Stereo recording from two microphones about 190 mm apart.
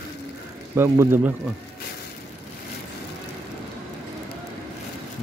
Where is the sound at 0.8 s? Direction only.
10° right (ahead or behind).